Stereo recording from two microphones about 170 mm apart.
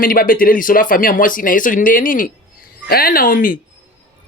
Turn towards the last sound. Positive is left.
turn(degrees=55)  # may be behind; listen again after turning